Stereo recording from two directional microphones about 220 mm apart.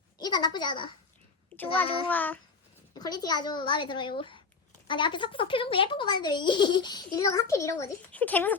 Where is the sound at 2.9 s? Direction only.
20° left (ahead or behind).